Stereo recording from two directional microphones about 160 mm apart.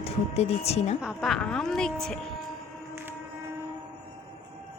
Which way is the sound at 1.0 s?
Centre (ahead or behind).